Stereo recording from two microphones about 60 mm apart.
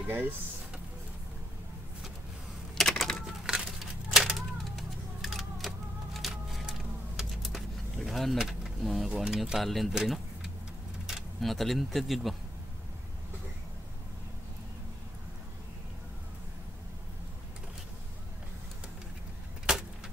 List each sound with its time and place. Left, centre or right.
0.0 s speech: right
2.7 s typewriter: centre
3.4 s a sound: centre
9.2 s speech: centre